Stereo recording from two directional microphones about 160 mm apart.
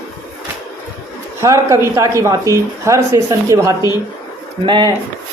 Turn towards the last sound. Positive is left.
turn(degrees=-30)  # may be behind; listen again after turning